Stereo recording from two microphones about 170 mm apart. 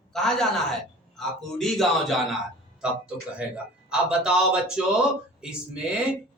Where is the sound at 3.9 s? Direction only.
5° right (ahead or behind).